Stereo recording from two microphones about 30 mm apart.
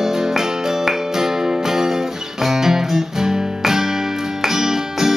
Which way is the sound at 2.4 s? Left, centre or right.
Centre.